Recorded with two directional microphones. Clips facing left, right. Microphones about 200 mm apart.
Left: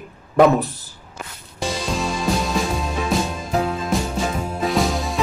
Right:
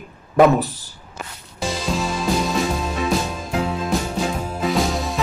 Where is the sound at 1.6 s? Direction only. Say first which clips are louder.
Even; centre (ahead or behind).